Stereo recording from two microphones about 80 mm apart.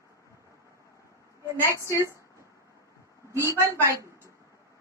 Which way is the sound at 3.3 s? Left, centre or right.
Right.